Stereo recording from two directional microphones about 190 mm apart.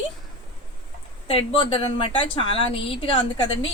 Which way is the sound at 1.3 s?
30° left (ahead or behind).